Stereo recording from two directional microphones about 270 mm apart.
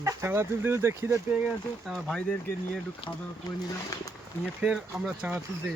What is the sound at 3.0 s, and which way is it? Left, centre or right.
Speech, centre.